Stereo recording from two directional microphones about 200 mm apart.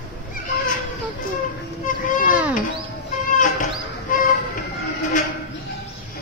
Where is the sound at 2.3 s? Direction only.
5° right (ahead or behind).